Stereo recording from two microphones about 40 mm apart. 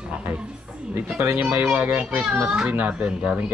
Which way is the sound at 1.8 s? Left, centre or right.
Right.